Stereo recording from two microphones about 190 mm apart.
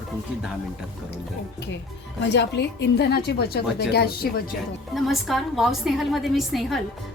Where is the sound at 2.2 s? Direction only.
65° left (ahead or behind).